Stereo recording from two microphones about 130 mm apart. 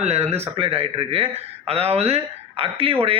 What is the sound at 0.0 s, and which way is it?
Speech, 55° right (ahead or behind).